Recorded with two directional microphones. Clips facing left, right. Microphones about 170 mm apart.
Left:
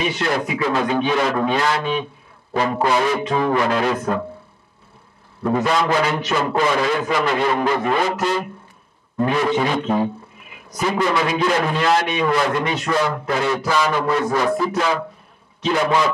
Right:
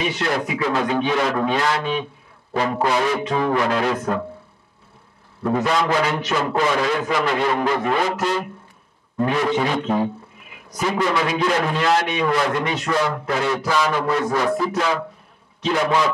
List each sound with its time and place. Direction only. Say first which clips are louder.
0.0 s a man's voice: left 1 dB; 10° left (ahead or behind)
4.0 s speech: left 1 dB; 20° left (ahead or behind)
5.4 s a man's voice: left 1 dB; 15° left (ahead or behind)